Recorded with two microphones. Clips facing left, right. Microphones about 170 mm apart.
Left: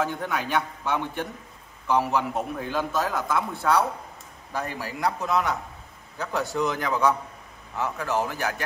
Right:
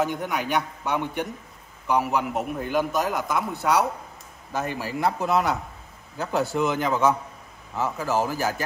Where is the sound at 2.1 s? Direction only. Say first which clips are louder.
Right 1 dB; 5° right (ahead or behind).